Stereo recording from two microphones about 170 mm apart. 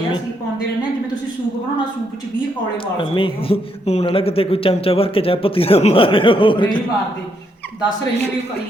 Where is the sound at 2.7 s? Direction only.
30° left (ahead or behind).